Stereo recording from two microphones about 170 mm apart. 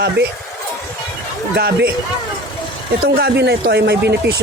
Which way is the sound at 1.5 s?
70° right (ahead or behind).